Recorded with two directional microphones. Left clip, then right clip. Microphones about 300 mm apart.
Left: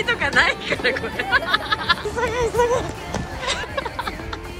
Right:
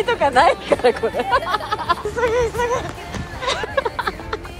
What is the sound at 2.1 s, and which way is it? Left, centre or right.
Speech, centre.